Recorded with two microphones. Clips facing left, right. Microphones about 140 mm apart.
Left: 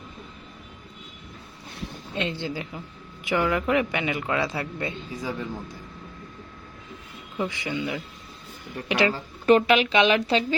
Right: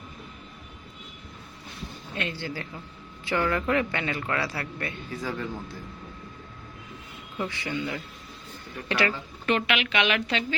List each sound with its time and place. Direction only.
2.1 s a woman's voice: 20° left (ahead or behind)
7.3 s a woman's voice: 15° left (ahead or behind)
9.1 s speech: 35° left (ahead or behind)